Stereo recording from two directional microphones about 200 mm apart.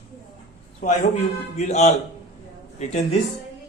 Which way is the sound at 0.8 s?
35° left (ahead or behind).